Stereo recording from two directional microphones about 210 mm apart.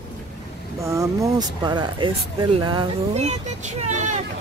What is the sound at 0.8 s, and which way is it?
Speech, 15° right (ahead or behind).